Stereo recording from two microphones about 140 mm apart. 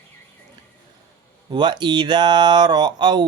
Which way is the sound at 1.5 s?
30° right (ahead or behind).